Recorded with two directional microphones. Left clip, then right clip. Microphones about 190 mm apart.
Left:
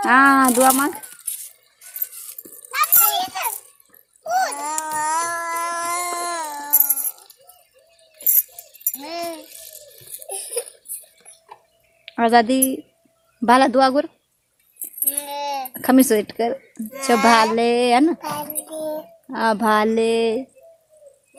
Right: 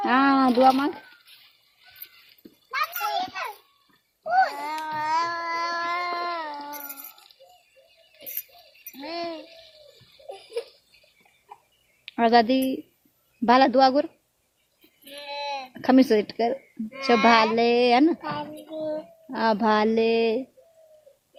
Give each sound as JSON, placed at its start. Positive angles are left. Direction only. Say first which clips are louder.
{"t": 0.0, "sound": "speech", "louder": "left 7 dB", "side_deg": 5}
{"t": 2.6, "sound": "children playing", "louder": "left 6 dB", "side_deg": -30}
{"t": 4.6, "sound": "a sound", "louder": "left 5 dB", "side_deg": 45}
{"t": 5.5, "sound": "baby cry", "louder": "left 3 dB", "side_deg": 15}
{"t": 9.0, "sound": "a sound", "louder": "left 3 dB", "side_deg": 15}
{"t": 12.0, "sound": "a woman's voice", "louder": "left 3 dB", "side_deg": 5}
{"t": 15.1, "sound": "child singing", "louder": "left 5 dB", "side_deg": 55}
{"t": 15.7, "sound": "a child's voice", "louder": "left 3 dB", "side_deg": 5}